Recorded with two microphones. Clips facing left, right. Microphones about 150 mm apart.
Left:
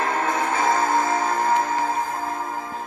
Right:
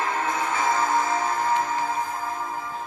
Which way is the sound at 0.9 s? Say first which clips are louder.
Left 2 dB; 55° left (ahead or behind).